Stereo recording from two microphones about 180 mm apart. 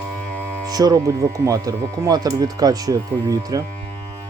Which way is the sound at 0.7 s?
20° right (ahead or behind).